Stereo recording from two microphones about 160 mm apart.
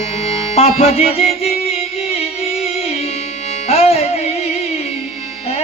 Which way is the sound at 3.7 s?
40° left (ahead or behind).